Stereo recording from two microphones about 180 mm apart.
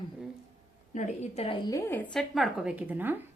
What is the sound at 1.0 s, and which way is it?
Speech, 35° left (ahead or behind).